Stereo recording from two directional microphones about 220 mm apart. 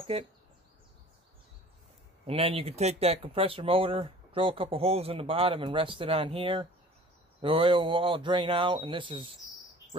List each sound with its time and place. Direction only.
0.1 s speech: 25° right (ahead or behind)
2.2 s speech: 25° right (ahead or behind)